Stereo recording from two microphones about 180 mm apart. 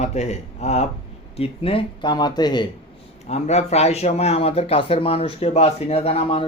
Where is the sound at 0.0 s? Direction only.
40° left (ahead or behind).